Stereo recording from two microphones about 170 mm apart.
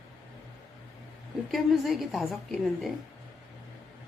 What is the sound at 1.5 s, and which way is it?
A woman's voice, centre (ahead or behind).